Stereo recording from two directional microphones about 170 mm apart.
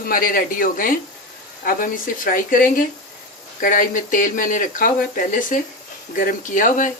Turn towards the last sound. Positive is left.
turn(degrees=50)  # may be behind; listen again after turning